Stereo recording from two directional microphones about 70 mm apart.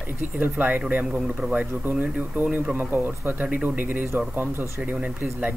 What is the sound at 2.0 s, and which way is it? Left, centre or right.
Speech, right.